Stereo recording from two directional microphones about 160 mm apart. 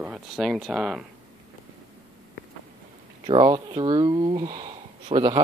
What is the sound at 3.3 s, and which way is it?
Speech, 30° right (ahead or behind).